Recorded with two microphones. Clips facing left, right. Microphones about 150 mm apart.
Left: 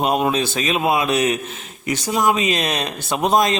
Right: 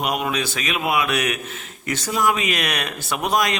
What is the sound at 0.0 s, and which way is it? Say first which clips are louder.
A man's voice: left 5 dB; 25° left (ahead or behind).